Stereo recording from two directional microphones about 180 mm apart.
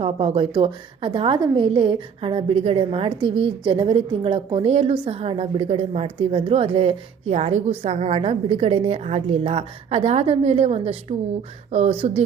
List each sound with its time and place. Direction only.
0.0 s a woman's voice: 30° right (ahead or behind)